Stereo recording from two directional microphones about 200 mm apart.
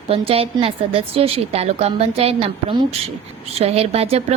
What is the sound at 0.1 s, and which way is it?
A woman's voice, 30° right (ahead or behind).